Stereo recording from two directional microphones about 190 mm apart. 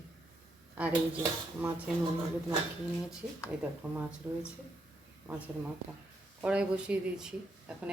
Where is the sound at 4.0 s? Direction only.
5° right (ahead or behind).